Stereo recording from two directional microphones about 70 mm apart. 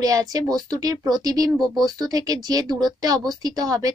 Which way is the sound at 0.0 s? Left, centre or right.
Right.